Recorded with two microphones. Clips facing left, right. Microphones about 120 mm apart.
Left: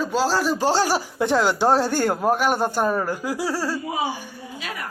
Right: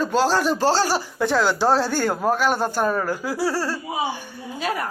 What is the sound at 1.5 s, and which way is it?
Speech, 15° left (ahead or behind).